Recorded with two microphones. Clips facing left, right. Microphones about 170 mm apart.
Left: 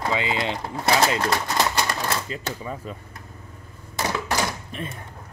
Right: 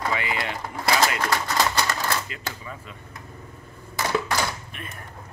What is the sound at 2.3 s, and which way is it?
Speech, 35° left (ahead or behind).